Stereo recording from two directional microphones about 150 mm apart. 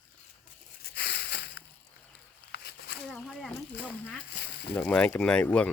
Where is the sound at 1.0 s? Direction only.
90° left.